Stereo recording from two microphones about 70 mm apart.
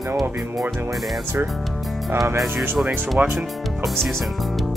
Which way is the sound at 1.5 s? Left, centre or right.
Centre.